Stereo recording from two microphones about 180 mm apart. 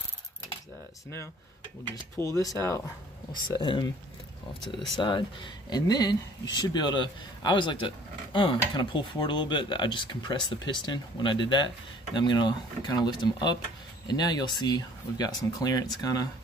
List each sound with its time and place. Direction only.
2.1 s speech: 15° left (ahead or behind)
4.9 s speech: 25° left (ahead or behind)